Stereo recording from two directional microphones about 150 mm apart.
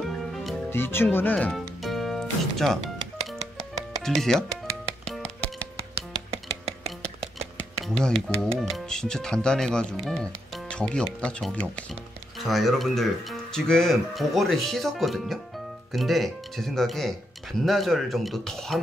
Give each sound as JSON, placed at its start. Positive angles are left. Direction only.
{"t": 0.3, "sound": "music", "side_deg": 0}
{"t": 0.7, "sound": "music", "side_deg": 15}
{"t": 4.0, "sound": "speech", "side_deg": 5}
{"t": 5.0, "sound": "music", "side_deg": 5}
{"t": 5.8, "sound": "music", "side_deg": -40}
{"t": 7.8, "sound": "speech", "side_deg": 5}